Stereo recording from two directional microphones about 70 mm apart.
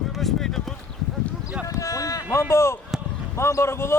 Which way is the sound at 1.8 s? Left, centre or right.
Left.